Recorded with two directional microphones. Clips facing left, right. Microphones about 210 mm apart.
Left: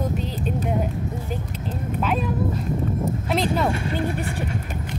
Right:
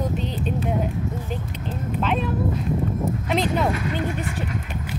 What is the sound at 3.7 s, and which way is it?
Speech, 30° left (ahead or behind).